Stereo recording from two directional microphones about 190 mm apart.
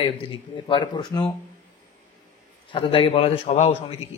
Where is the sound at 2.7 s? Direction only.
30° left (ahead or behind).